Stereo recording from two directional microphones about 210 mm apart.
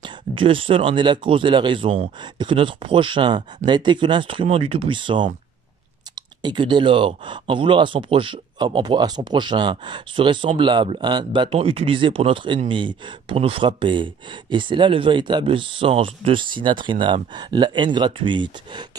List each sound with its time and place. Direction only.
0.3 s speech: 25° right (ahead or behind)
6.4 s speech: 20° right (ahead or behind)